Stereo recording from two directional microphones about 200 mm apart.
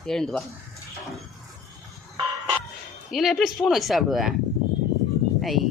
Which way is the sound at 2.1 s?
10° right (ahead or behind).